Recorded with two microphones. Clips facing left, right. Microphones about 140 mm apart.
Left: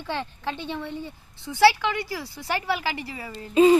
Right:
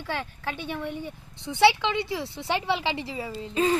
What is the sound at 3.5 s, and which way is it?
Speech, 15° left (ahead or behind).